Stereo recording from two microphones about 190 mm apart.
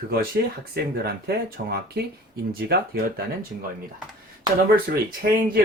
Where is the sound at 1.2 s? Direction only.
55° right (ahead or behind).